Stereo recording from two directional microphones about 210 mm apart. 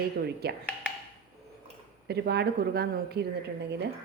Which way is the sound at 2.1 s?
50° right (ahead or behind).